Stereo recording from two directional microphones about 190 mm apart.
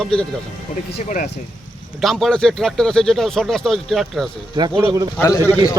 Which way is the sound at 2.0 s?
Centre (ahead or behind).